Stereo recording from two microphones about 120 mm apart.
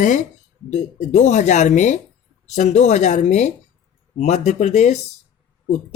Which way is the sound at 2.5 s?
75° left (ahead or behind).